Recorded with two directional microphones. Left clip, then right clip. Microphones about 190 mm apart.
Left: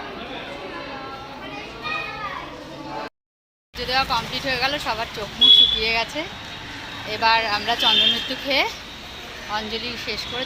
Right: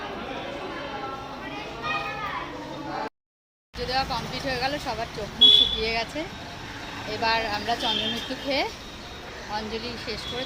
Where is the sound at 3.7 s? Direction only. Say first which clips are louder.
Left 5 dB; 10° left (ahead or behind).